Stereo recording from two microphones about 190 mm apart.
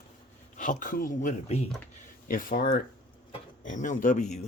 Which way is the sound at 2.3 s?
45° left (ahead or behind).